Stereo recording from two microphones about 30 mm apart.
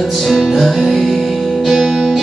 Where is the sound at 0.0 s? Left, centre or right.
Centre.